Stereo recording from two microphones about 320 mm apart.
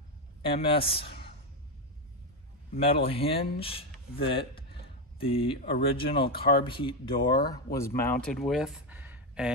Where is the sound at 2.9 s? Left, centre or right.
Centre.